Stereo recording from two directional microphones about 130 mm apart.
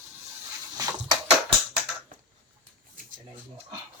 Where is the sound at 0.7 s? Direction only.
25° right (ahead or behind).